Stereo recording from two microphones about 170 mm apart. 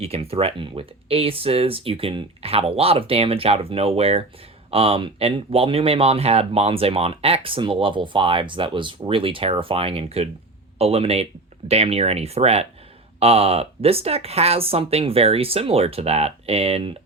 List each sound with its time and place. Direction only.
0.0 s speech: 35° right (ahead or behind)